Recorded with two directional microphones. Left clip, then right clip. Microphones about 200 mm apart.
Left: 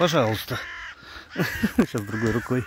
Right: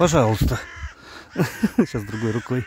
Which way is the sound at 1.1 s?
35° right (ahead or behind).